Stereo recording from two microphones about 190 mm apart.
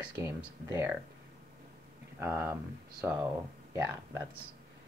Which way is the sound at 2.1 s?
10° right (ahead or behind).